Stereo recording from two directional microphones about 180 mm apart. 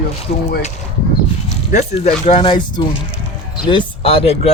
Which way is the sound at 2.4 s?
25° left (ahead or behind).